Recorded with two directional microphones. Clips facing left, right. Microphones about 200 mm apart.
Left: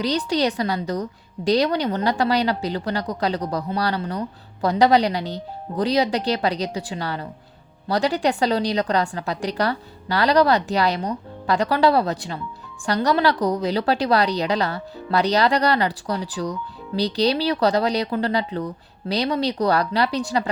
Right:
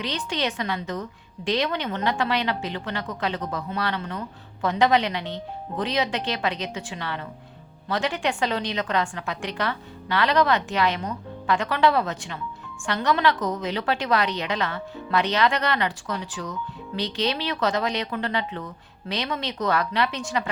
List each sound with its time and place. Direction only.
0.0 s a woman's voice: 35° left (ahead or behind)